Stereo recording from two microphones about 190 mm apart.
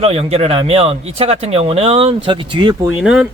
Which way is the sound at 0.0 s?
30° right (ahead or behind).